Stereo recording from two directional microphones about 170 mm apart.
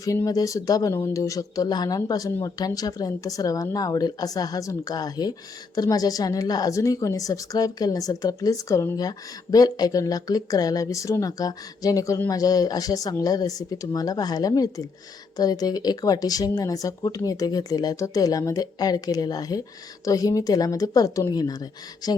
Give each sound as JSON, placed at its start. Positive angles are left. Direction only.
{"t": 0.0, "sound": "a woman's voice", "side_deg": 20}